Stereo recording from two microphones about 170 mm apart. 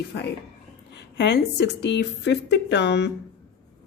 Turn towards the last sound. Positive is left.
turn(degrees=85)